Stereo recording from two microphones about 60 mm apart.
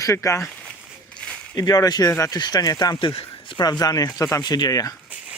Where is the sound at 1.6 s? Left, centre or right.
Left.